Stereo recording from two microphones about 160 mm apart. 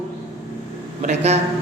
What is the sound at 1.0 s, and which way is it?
Speech, 45° right (ahead or behind).